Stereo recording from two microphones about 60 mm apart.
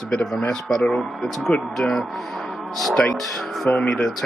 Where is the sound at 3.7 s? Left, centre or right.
Centre.